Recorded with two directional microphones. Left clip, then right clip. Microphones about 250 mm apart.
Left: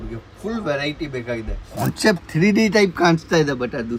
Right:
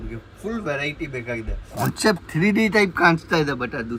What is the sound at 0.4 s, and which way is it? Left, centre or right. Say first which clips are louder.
Speech: left 3 dB; centre.